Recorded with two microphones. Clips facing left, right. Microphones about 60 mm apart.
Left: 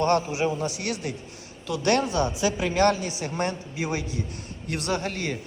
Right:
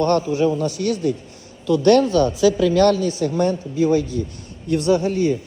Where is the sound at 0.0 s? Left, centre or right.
Left.